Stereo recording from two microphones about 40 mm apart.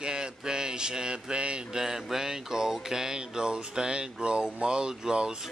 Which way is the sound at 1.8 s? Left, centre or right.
Centre.